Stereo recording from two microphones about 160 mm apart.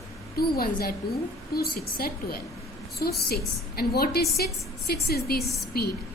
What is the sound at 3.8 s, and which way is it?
A woman's voice, 75° left (ahead or behind).